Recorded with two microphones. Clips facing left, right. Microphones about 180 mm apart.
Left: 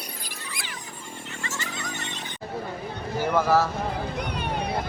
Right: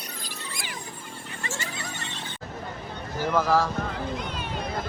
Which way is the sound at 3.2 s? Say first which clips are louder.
Left 1 dB; 10° left (ahead or behind).